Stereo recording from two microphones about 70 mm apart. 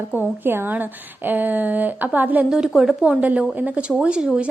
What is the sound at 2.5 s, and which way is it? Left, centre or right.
A woman's voice, centre.